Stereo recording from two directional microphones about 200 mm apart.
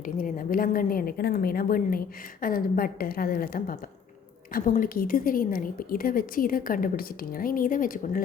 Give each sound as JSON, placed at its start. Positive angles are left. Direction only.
{"t": 0.0, "sound": "a woman's voice", "side_deg": 45}